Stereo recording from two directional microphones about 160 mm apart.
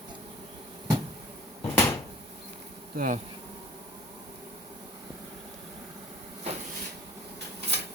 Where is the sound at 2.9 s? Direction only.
65° right (ahead or behind).